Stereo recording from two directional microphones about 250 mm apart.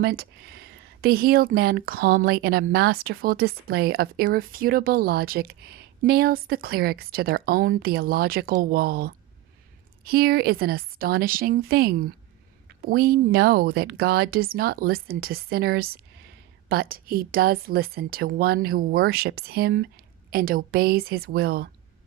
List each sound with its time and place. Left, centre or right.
0.0 s speech: right